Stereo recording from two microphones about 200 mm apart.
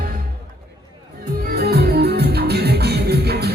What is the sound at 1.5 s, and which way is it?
Music, 50° right (ahead or behind).